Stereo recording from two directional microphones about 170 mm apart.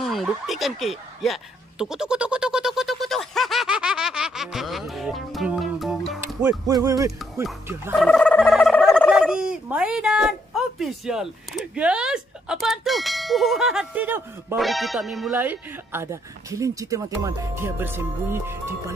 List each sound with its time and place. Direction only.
0.0 s a sound: centre (ahead or behind)
6.4 s music: 20° right (ahead or behind)
7.6 s speech: 15° right (ahead or behind)
8.0 s speech: 5° left (ahead or behind); by 14.6 s 10° right (ahead or behind)
14.6 s speech: centre (ahead or behind)
15.3 s speech: 10° right (ahead or behind)